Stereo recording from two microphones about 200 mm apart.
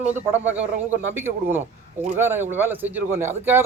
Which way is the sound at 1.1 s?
10° right (ahead or behind).